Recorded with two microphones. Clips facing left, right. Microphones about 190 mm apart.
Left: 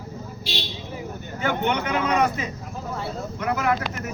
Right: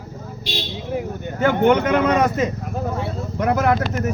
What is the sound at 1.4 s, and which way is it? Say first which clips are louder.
Speech: right 8 dB; 50° right (ahead or behind).